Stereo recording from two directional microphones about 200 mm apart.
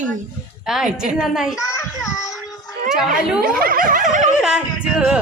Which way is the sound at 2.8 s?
Centre (ahead or behind).